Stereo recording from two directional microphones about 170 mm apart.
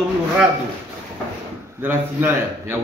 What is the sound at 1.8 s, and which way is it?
Speech, 10° right (ahead or behind).